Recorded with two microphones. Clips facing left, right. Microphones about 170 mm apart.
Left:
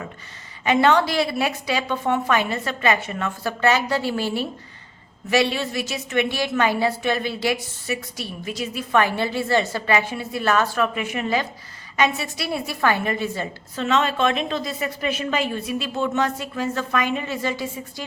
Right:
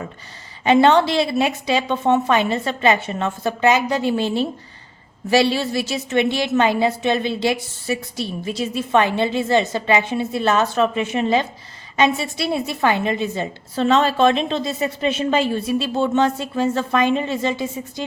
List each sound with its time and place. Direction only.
0.6 s a woman's voice: 30° right (ahead or behind)